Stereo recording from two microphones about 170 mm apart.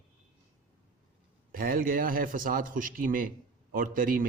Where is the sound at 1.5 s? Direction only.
55° right (ahead or behind).